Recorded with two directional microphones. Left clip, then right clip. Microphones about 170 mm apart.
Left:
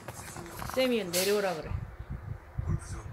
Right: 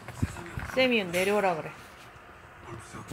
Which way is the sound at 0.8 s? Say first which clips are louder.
Right 4 dB; 25° left (ahead or behind).